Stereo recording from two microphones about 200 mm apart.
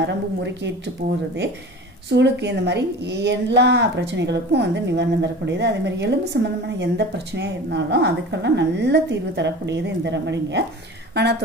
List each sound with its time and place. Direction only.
0.0 s speech: 60° right (ahead or behind)
2.0 s speech: 60° right (ahead or behind)